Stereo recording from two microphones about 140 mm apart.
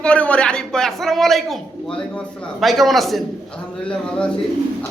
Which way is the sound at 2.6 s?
Centre (ahead or behind).